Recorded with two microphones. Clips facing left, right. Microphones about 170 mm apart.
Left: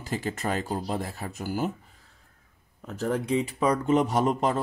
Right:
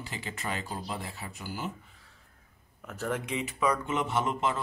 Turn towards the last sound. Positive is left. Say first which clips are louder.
# left 5 dB
turn(degrees=40)  # may be behind; listen again after turning